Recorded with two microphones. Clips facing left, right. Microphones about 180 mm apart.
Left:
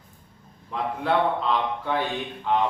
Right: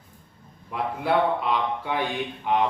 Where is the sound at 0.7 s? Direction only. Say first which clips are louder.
Even; 10° right (ahead or behind).